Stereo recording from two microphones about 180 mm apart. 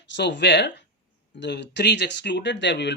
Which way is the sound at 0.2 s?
75° left (ahead or behind).